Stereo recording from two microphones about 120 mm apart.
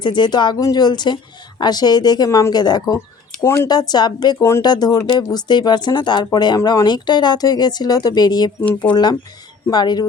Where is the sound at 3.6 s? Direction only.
35° left (ahead or behind).